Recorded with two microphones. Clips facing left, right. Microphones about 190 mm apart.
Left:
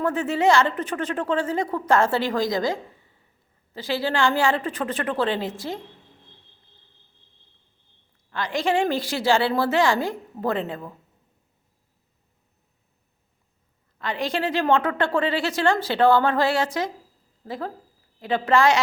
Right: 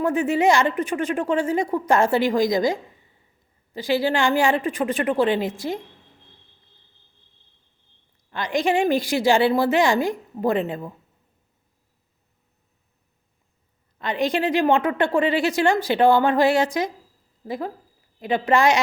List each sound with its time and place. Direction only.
0.0 s a woman's voice: 15° right (ahead or behind)
3.8 s a woman's voice: 15° right (ahead or behind)
8.3 s a woman's voice: 15° right (ahead or behind)
14.0 s a woman's voice: 20° right (ahead or behind)